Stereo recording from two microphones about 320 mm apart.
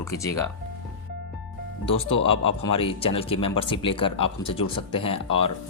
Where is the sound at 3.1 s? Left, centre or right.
Centre.